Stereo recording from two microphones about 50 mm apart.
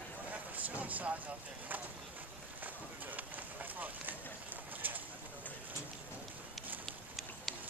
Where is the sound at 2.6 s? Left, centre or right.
Right.